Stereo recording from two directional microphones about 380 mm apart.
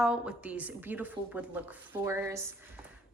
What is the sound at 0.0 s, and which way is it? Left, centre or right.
Speech, centre.